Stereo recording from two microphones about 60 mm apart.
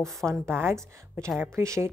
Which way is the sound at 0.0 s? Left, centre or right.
Right.